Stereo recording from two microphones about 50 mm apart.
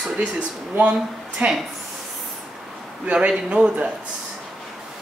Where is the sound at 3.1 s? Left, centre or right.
Right.